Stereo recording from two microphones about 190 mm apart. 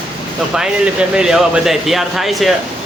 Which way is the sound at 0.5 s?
5° right (ahead or behind).